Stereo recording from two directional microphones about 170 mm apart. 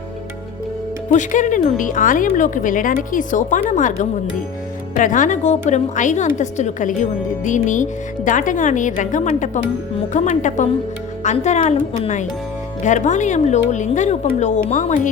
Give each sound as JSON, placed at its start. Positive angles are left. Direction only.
{"t": 1.1, "sound": "speech", "side_deg": 50}